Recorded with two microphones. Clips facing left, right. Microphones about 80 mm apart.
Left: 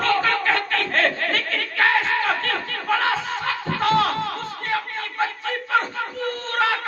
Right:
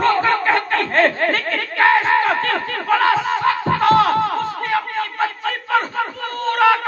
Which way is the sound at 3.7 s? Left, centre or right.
Right.